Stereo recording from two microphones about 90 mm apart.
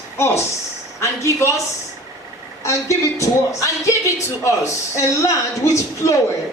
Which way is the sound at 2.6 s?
35° left (ahead or behind).